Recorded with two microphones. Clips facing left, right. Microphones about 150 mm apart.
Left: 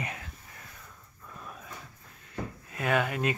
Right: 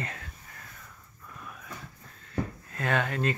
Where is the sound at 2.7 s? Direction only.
10° left (ahead or behind).